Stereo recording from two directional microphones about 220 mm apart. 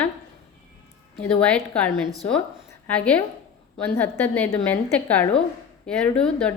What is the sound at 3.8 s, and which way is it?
A woman's voice, 10° left (ahead or behind).